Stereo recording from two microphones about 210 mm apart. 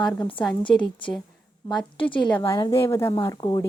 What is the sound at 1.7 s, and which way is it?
Speech, 5° left (ahead or behind).